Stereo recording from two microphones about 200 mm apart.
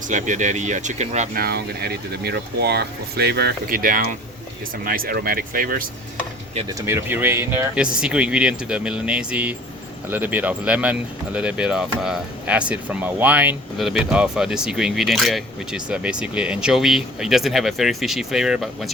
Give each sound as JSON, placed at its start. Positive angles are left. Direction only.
{"t": 0.1, "sound": "speech", "side_deg": -35}
{"t": 6.7, "sound": "speech", "side_deg": -15}